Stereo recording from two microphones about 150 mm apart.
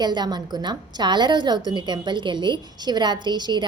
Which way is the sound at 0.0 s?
30° right (ahead or behind).